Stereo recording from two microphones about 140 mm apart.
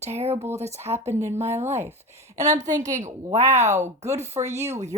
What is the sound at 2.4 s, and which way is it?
Speech, 55° right (ahead or behind).